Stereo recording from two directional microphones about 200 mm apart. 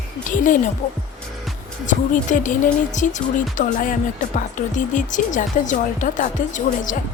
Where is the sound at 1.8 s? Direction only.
40° left (ahead or behind).